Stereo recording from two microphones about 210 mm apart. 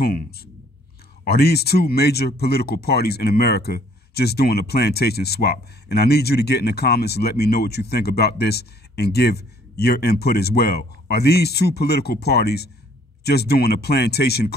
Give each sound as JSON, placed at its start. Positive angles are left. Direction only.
{"t": 0.0, "sound": "speech", "side_deg": 50}